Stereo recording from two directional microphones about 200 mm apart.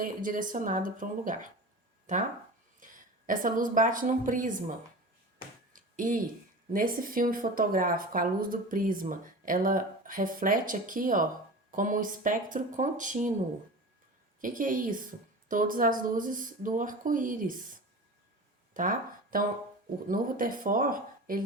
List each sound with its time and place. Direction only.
0.0 s speech: 45° right (ahead or behind)
5.7 s a sound: 40° right (ahead or behind)
6.7 s speech: 45° right (ahead or behind)
14.4 s speech: 40° right (ahead or behind)
18.7 s speech: 40° right (ahead or behind)